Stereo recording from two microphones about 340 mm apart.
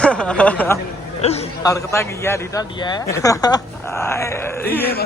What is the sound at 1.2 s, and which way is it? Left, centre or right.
A man's voice, centre.